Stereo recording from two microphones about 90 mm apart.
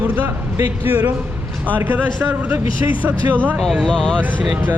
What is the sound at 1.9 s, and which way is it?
Speech, 20° right (ahead or behind).